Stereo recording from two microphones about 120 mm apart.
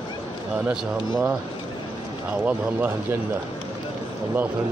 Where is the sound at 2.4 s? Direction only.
15° right (ahead or behind).